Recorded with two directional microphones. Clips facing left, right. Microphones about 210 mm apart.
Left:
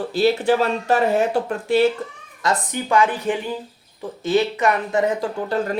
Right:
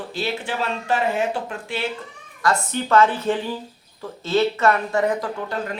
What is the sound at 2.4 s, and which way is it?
Speech, 15° left (ahead or behind).